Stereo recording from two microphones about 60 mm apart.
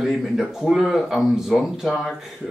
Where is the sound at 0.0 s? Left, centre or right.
Centre.